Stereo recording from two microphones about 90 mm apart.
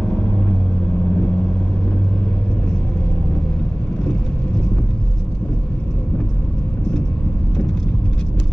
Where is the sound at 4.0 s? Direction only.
15° left (ahead or behind).